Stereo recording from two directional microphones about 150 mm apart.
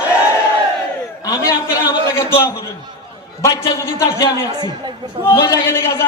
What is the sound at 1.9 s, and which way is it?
A man's voice, 20° left (ahead or behind).